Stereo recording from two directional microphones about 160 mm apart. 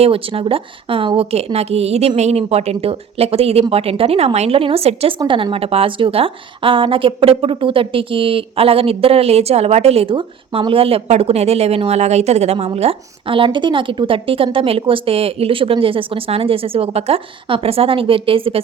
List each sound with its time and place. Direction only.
0.0 s a woman's voice: 35° right (ahead or behind)